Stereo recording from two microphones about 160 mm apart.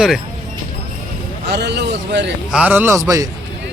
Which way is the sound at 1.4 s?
90° right.